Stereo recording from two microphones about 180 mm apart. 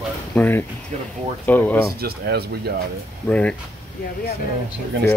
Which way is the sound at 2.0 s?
60° right (ahead or behind).